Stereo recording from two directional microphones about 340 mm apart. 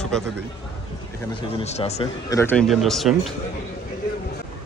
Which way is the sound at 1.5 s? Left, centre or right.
Centre.